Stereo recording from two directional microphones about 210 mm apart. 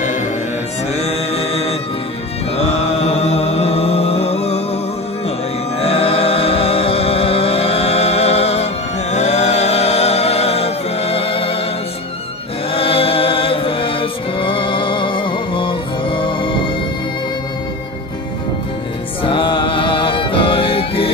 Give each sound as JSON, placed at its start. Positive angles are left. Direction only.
{"t": 1.0, "sound": "mantra", "side_deg": 30}
{"t": 5.8, "sound": "music", "side_deg": 30}
{"t": 12.7, "sound": "music", "side_deg": 25}
{"t": 19.2, "sound": "music", "side_deg": 25}